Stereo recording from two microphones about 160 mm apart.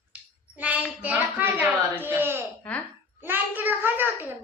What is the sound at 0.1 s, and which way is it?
Child singing, 10° right (ahead or behind).